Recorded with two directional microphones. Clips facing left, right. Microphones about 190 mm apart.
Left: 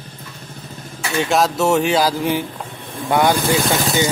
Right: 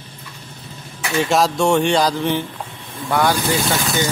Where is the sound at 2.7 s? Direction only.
50° left (ahead or behind).